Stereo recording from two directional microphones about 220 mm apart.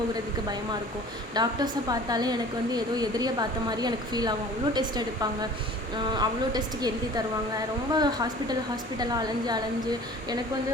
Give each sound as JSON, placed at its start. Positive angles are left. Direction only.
{"t": 1.3, "sound": "a woman's voice", "side_deg": -20}
{"t": 7.9, "sound": "a woman's voice", "side_deg": -20}